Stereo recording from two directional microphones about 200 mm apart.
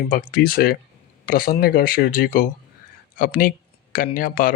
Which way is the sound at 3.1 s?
45° left (ahead or behind).